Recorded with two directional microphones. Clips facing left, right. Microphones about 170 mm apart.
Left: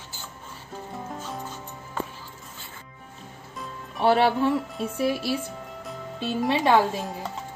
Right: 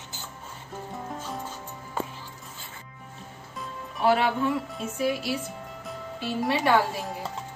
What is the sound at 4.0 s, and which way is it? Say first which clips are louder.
Speech: left 3 dB; 30° left (ahead or behind).